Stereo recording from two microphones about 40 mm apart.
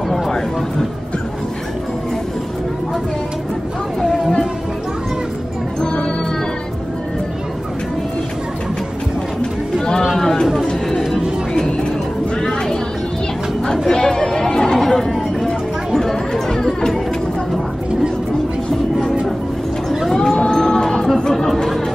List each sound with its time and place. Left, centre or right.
0.1 s speech: centre
4.0 s music: centre
9.8 s a sound: centre
10.1 s chatter: centre
11.0 s music: centre
11.5 s music: centre
12.4 s a sound: centre
13.8 s chatter: centre
20.1 s a sound: centre
21.2 s chatter: centre